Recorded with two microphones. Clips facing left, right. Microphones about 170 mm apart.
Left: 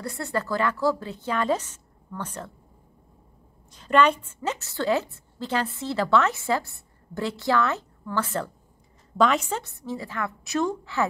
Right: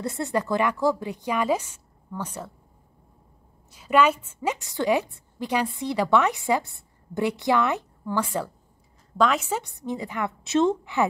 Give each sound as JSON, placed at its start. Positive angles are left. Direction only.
{"t": 0.0, "sound": "a woman's voice", "side_deg": -20}
{"t": 3.7, "sound": "a woman's voice", "side_deg": -10}
{"t": 9.1, "sound": "a woman's voice", "side_deg": 0}
{"t": 9.6, "sound": "a woman's voice", "side_deg": -20}